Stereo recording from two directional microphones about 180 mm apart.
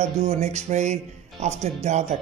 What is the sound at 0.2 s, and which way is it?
A man's voice, 35° right (ahead or behind).